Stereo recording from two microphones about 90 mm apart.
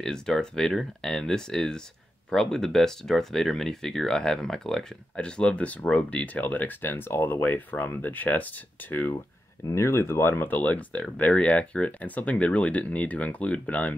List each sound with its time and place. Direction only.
0.0 s speech: 5° left (ahead or behind)
9.7 s speech: 30° left (ahead or behind); by 13.9 s 15° left (ahead or behind)